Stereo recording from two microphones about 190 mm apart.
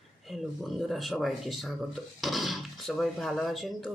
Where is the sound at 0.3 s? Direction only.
Centre (ahead or behind).